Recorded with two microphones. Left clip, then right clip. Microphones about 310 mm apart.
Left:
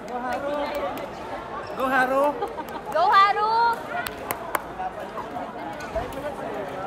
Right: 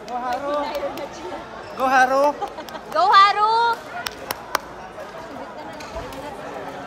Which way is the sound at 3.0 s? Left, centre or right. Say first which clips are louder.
Right 4 dB; right.